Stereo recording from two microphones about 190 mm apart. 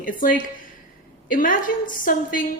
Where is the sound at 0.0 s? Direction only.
45° left (ahead or behind).